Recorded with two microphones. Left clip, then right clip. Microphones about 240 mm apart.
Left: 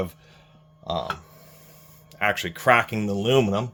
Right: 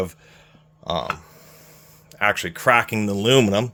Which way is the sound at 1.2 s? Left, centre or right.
Right.